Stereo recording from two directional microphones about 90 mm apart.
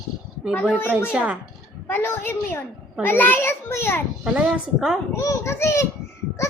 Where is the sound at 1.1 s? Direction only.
15° right (ahead or behind).